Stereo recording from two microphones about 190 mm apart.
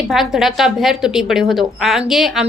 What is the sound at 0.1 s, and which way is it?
A woman's voice, centre (ahead or behind).